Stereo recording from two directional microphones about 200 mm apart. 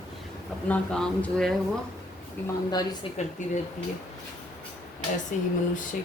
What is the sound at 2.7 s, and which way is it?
Speech, 20° left (ahead or behind).